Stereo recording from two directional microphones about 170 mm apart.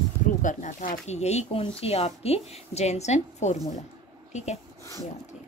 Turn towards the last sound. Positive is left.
turn(degrees=40)  # may be behind; listen again after turning